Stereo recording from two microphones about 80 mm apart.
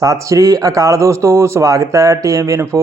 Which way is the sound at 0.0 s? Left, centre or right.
Right.